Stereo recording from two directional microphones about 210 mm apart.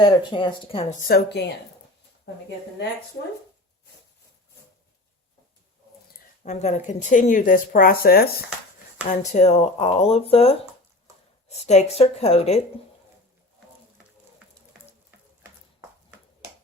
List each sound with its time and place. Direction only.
0.0 s speech: 25° left (ahead or behind)
1.0 s speech: 50° left (ahead or behind)
6.4 s speech: 30° left (ahead or behind)
9.0 s speech: 35° left (ahead or behind)